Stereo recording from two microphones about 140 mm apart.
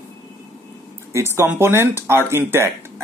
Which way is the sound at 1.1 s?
20° right (ahead or behind).